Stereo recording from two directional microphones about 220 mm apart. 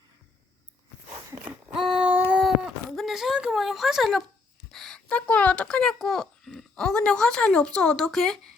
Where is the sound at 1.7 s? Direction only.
Centre (ahead or behind).